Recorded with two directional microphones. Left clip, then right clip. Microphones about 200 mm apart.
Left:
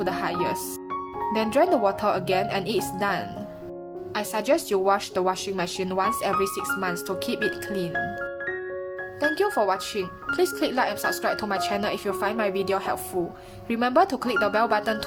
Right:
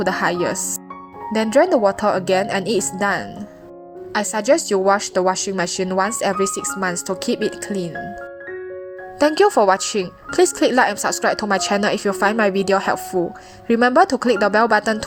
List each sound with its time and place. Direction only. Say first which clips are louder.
0.0 s speech: right 7 dB; 25° right (ahead or behind)
9.1 s speech: right 9 dB; 35° right (ahead or behind)